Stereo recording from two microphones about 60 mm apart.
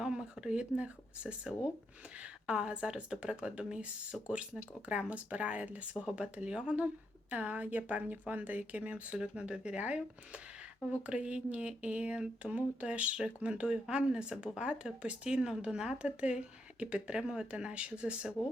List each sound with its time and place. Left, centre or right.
0.0 s speech: centre
7.3 s speech: right